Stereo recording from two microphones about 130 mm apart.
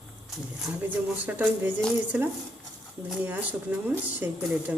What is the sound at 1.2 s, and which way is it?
Speech, 10° right (ahead or behind).